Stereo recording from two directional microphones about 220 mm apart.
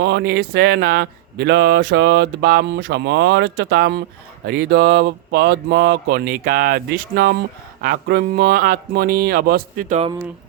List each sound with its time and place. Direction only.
0.0 s speech: 50° right (ahead or behind)